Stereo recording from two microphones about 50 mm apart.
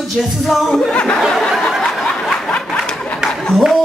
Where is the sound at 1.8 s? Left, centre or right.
Centre.